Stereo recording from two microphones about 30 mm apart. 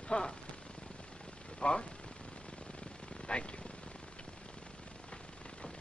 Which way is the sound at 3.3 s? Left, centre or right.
Left.